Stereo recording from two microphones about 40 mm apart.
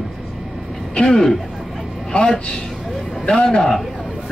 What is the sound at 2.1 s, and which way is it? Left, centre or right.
A man's voice, left.